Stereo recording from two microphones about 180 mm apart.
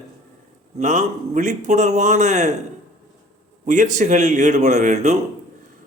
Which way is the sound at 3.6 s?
45° right (ahead or behind).